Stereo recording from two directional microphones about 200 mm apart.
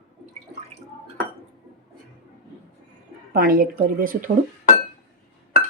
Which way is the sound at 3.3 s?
50° right (ahead or behind).